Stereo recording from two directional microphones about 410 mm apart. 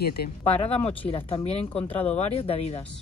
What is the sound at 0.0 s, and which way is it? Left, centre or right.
A woman's voice, left.